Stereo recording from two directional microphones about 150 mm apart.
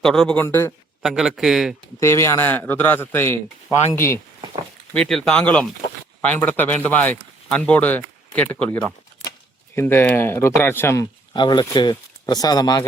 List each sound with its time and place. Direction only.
0.0 s a man's voice: 5° left (ahead or behind)
0.4 s a man's voice: 15° left (ahead or behind)
1.0 s a man's voice: 5° right (ahead or behind)
2.0 s a man's voice: 20° left (ahead or behind)
4.9 s a man's voice: 5° left (ahead or behind)
11.3 s speech: 30° left (ahead or behind)